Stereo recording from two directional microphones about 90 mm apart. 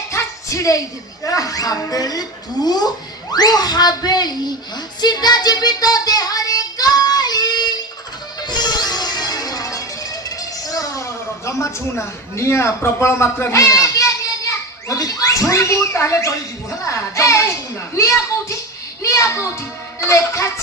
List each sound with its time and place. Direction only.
0.1 s a sound: 35° left (ahead or behind)
1.2 s a woman's voice: 40° left (ahead or behind)
4.9 s child singing: 50° left (ahead or behind)
8.4 s music: 50° left (ahead or behind); by 11.7 s 35° left (ahead or behind)
12.4 s speech: 30° left (ahead or behind)
16.8 s music: 35° left (ahead or behind)
17.9 s a woman's voice: 35° left (ahead or behind)